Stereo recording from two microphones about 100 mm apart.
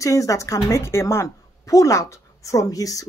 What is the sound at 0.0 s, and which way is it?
A woman's voice, 35° left (ahead or behind).